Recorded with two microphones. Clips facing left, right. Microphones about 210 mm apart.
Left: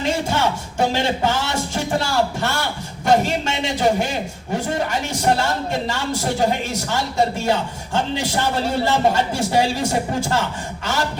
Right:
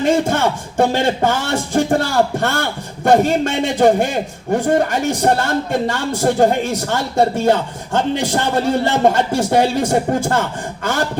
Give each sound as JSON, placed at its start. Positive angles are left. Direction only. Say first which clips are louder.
{"t": 0.0, "sound": "a man's voice", "louder": "right 5 dB", "side_deg": -50}